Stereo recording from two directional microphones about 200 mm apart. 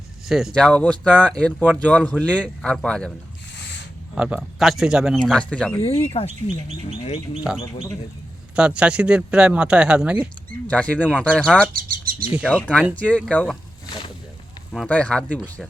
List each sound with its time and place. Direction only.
0.3 s speech: centre (ahead or behind)
4.1 s speech: 5° right (ahead or behind)
5.8 s speech: 30° left (ahead or behind)
8.5 s speech: 5° right (ahead or behind)
10.7 s speech: 5° left (ahead or behind)
11.7 s bird: 45° right (ahead or behind)
12.5 s speech: 5° left (ahead or behind)
14.7 s speech: 5° left (ahead or behind)